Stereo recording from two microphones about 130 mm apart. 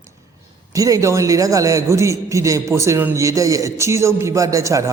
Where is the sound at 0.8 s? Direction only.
25° right (ahead or behind).